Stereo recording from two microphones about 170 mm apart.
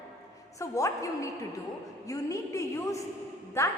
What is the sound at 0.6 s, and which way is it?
A woman's voice, 20° left (ahead or behind).